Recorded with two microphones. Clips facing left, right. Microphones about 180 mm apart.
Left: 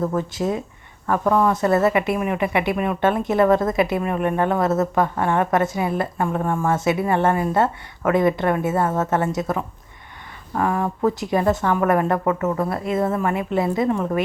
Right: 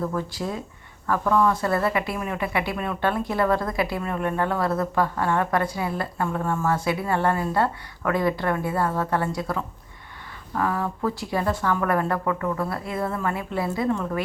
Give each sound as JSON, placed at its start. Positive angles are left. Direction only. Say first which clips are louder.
{"t": 0.0, "sound": "speech", "louder": "left 5 dB", "side_deg": 20}